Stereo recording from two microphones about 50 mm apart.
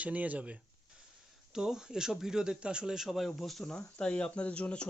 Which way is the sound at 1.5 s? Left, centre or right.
Centre.